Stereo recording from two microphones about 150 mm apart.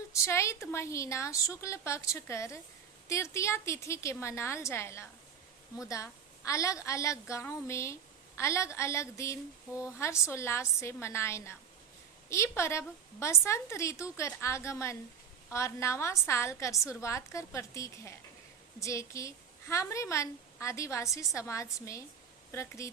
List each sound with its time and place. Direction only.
0.1 s a woman's voice: 20° left (ahead or behind)